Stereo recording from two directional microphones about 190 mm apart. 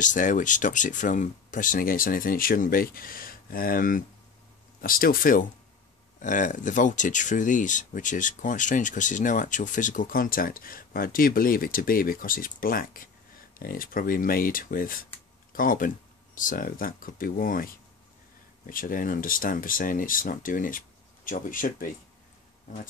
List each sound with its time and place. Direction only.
0.0 s speech: 40° left (ahead or behind)